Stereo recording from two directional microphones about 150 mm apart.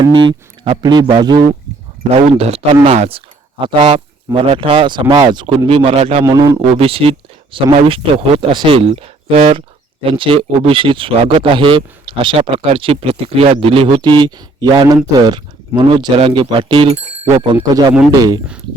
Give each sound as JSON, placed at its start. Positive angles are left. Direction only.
{"t": 0.0, "sound": "speech", "side_deg": -35}
{"t": 2.8, "sound": "speech", "side_deg": -40}
{"t": 6.2, "sound": "speech", "side_deg": -20}
{"t": 6.7, "sound": "speech", "side_deg": -40}
{"t": 17.5, "sound": "speech", "side_deg": -30}